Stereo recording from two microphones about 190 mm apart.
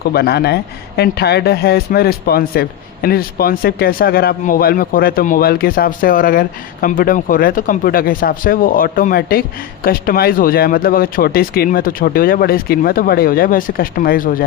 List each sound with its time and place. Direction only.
0.1 s speech: 55° left (ahead or behind)